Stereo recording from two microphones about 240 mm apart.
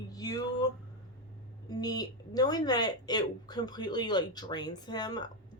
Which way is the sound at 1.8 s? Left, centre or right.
Centre.